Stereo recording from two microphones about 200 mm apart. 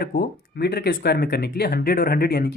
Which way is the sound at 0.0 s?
50° left (ahead or behind).